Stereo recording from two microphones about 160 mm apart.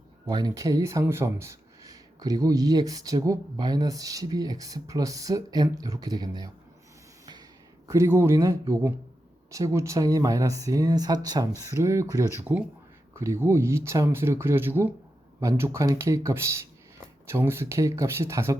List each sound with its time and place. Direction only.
0.3 s speech: 25° right (ahead or behind)
7.9 s speech: 20° right (ahead or behind)